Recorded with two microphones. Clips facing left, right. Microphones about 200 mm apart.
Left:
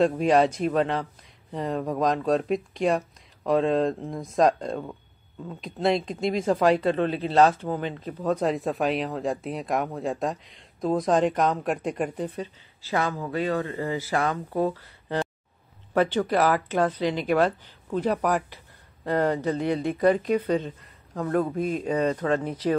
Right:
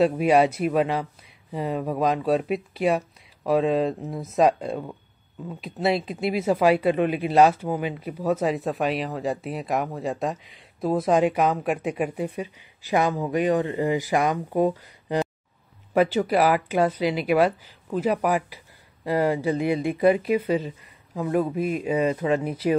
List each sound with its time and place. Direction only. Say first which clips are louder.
0.0 s speech: right 1 dB; 10° right (ahead or behind)